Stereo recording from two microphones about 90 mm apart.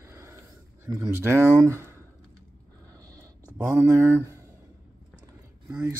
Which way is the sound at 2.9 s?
45° right (ahead or behind).